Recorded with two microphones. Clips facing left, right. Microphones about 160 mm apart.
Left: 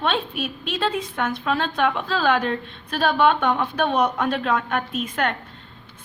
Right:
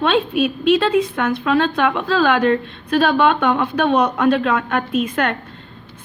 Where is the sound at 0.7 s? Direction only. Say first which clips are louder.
Right 10 dB; 75° right (ahead or behind).